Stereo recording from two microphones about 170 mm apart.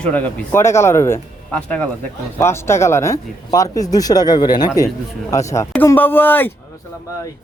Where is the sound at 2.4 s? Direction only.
15° left (ahead or behind).